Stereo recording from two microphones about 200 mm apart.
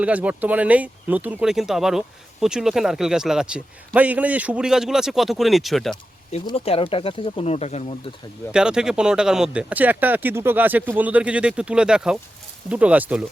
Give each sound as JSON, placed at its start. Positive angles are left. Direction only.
{"t": 0.0, "sound": "speech", "side_deg": -5}
{"t": 6.4, "sound": "speech", "side_deg": 25}
{"t": 8.5, "sound": "speech", "side_deg": -5}